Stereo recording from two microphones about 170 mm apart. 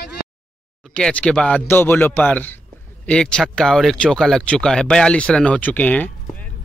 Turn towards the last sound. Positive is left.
turn(degrees=10)  # may be behind; listen again after turning